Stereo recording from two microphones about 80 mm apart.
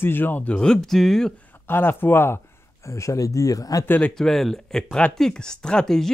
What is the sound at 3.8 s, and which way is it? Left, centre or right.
Speech, left.